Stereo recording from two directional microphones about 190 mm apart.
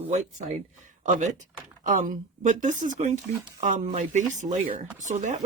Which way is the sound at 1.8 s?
45° right (ahead or behind).